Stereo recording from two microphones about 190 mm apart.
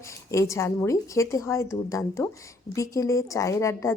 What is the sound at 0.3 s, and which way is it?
A woman's voice, 15° left (ahead or behind).